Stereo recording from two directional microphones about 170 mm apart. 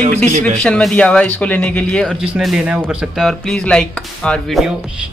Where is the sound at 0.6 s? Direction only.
5° left (ahead or behind).